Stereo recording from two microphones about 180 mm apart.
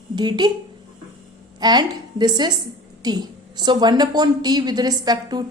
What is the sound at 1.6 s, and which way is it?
A woman's voice, 25° right (ahead or behind).